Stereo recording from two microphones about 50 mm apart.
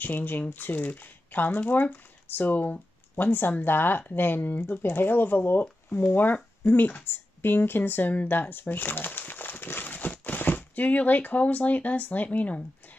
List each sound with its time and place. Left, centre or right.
0.0 s speech: left